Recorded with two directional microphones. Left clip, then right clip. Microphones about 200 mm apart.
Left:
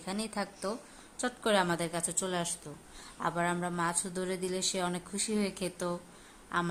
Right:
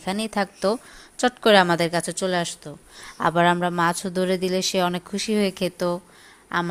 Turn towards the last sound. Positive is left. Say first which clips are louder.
# right 8 dB
turn(degrees=-25)  # may be behind; listen again after turning